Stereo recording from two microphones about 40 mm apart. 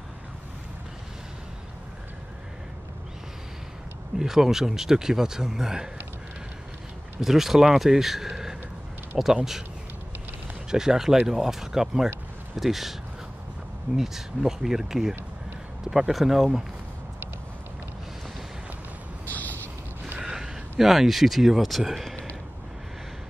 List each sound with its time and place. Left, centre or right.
4.2 s speech: centre
7.2 s speech: centre
8.3 s gasp: centre
9.2 s speech: centre
10.7 s speech: centre
13.9 s speech: centre
19.2 s creak: left
20.2 s a sound: centre
20.8 s speech: centre